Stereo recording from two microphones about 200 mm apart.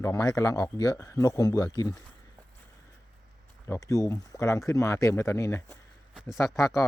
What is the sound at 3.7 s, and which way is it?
Speech, 15° left (ahead or behind).